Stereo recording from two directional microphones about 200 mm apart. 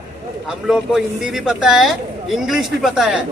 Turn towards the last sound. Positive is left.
turn(degrees=0)  # may be behind; listen again after turning